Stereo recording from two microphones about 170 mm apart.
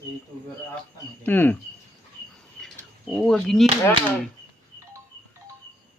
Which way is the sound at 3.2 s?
Centre (ahead or behind).